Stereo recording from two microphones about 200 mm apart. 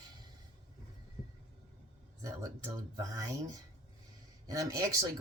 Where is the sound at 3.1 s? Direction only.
15° right (ahead or behind).